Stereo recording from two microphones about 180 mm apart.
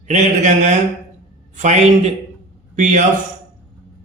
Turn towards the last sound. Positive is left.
turn(degrees=-45)  # may be behind; listen again after turning